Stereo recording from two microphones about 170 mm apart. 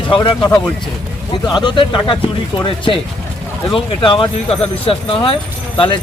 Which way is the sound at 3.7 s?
30° left (ahead or behind).